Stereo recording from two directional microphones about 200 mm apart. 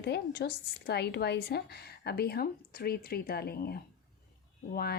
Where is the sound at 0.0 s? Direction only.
55° left (ahead or behind).